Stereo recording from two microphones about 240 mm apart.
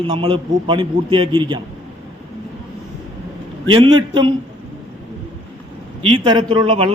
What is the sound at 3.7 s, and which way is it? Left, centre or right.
Speech, right.